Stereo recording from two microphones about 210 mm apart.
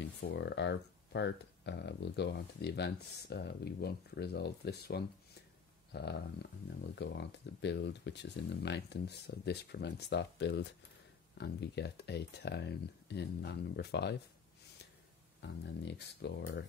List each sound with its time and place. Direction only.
0.0 s speech: 60° left (ahead or behind)
5.9 s a sound: 50° left (ahead or behind)
6.8 s speech: 55° left (ahead or behind)
15.4 s speech: 55° left (ahead or behind)